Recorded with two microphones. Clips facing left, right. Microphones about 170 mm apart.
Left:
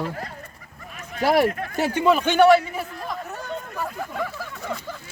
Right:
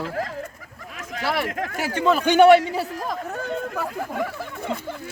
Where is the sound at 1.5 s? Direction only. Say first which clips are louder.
Left 2 dB; 90° right.